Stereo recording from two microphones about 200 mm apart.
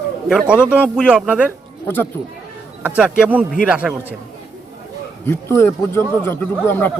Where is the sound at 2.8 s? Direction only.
5° right (ahead or behind).